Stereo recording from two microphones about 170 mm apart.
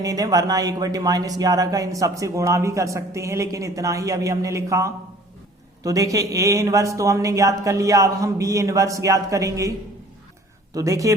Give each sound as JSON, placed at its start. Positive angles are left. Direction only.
{"t": 0.0, "sound": "speech", "side_deg": -20}
{"t": 10.8, "sound": "speech", "side_deg": -20}